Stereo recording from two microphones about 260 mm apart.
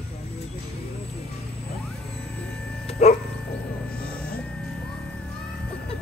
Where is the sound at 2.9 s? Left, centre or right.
Left.